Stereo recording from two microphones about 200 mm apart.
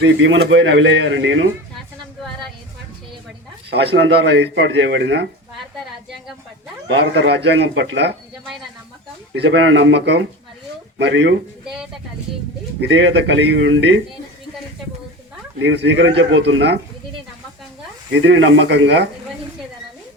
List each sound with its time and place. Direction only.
0.0 s speech: 65° right (ahead or behind)
3.9 s speech: 60° right (ahead or behind)
6.8 s speech: 60° right (ahead or behind)
9.3 s speech: 60° right (ahead or behind)
12.8 s speech: 60° right (ahead or behind)
15.5 s speech: 60° right (ahead or behind)
18.1 s speech: 65° right (ahead or behind)